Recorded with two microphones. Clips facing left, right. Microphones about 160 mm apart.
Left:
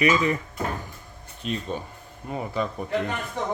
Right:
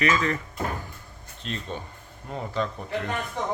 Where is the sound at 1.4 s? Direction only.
10° left (ahead or behind).